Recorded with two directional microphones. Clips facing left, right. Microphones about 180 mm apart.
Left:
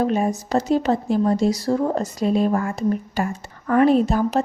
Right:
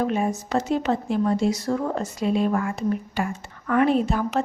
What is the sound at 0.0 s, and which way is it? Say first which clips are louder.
Speech: left 3 dB; 40° left (ahead or behind).